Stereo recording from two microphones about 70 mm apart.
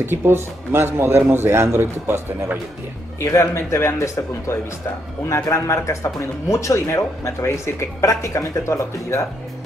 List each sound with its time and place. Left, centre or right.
0.0 s a man's voice: right
3.2 s a man's voice: left